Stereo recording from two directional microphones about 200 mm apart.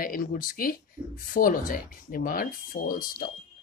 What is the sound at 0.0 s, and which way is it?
Speech, 45° left (ahead or behind).